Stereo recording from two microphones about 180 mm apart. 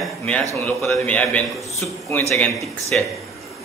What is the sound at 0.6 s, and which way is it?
A man's voice, 10° left (ahead or behind).